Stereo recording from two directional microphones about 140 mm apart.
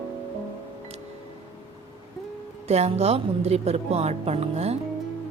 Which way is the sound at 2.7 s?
50° right (ahead or behind).